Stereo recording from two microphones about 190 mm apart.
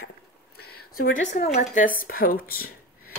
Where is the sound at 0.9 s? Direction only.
50° left (ahead or behind).